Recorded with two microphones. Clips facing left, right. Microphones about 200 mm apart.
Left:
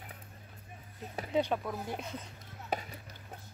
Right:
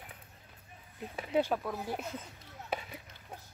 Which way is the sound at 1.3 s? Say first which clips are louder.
Right 1 dB; 5° right (ahead or behind).